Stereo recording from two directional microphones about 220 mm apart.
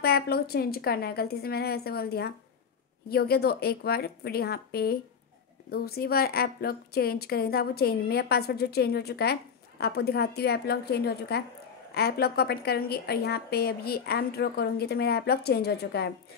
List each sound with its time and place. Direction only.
0.0 s a woman's voice: 45° left (ahead or behind)